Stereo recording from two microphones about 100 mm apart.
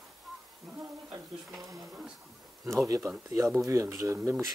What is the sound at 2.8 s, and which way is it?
Speech, 35° right (ahead or behind).